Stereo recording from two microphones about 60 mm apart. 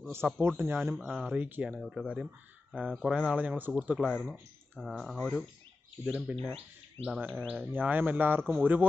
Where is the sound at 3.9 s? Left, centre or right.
Centre.